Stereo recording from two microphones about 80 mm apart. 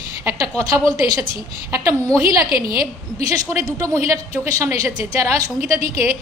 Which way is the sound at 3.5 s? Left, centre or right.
Right.